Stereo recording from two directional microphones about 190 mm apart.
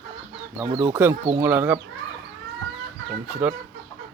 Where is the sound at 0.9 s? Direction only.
10° right (ahead or behind).